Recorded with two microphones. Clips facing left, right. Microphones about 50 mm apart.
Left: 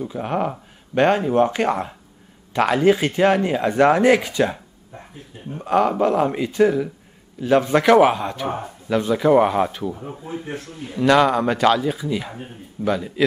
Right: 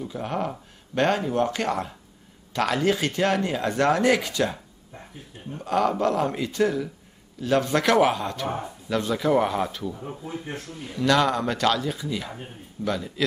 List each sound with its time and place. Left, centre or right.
0.0 s a man's voice: centre
10.5 s a man's voice: left; by 13.2 s centre